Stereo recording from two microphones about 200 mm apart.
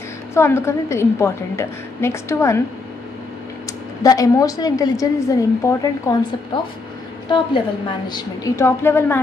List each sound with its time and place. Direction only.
0.3 s a woman's voice: 15° left (ahead or behind)
4.0 s a woman's voice: 15° left (ahead or behind)
8.1 s a woman's voice: 15° left (ahead or behind)